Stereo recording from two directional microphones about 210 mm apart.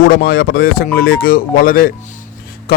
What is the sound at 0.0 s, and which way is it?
A man's voice, 45° left (ahead or behind).